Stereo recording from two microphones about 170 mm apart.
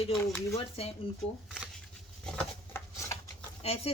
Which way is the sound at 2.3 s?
10° left (ahead or behind).